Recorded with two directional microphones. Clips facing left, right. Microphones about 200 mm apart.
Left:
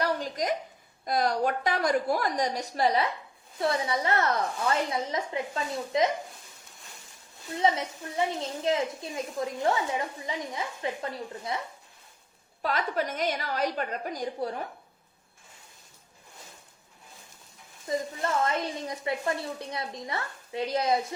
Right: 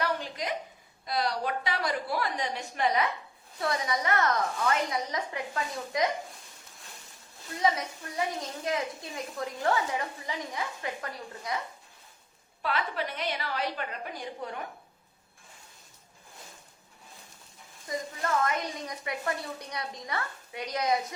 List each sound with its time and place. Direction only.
0.0 s a sound: 40° left (ahead or behind)
1.0 s a woman's voice: 45° left (ahead or behind); by 6.1 s 25° left (ahead or behind)
8.1 s a woman's voice: 25° left (ahead or behind)
12.6 s a woman's voice: 45° left (ahead or behind)
17.8 s a woman's voice: 30° left (ahead or behind)